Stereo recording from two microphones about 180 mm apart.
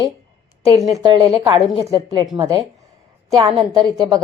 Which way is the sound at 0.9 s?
20° right (ahead or behind).